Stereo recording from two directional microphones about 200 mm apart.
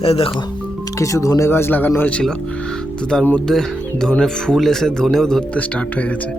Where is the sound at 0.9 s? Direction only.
15° left (ahead or behind).